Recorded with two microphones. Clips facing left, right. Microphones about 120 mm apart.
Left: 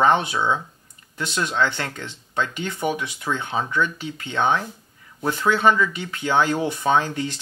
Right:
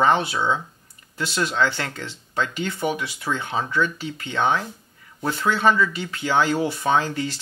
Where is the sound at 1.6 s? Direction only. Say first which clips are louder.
Even; 20° left (ahead or behind).